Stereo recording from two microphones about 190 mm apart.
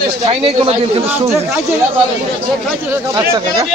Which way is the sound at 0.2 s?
30° right (ahead or behind).